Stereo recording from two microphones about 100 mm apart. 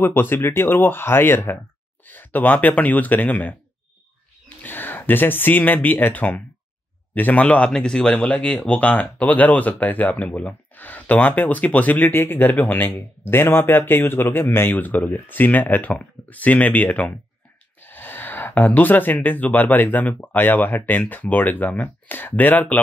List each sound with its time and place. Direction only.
0.0 s speech: 20° left (ahead or behind)
4.6 s speech: 20° left (ahead or behind)